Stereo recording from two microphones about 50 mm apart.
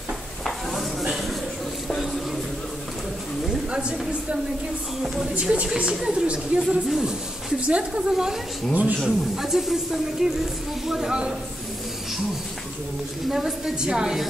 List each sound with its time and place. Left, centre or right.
0.4 s stir: centre
5.0 s speech: centre
5.4 s a woman's voice: centre
7.6 s a woman's voice: right
8.1 s speech: centre
13.3 s speech: centre